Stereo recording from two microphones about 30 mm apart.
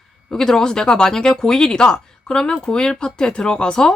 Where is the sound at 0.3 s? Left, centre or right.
Centre.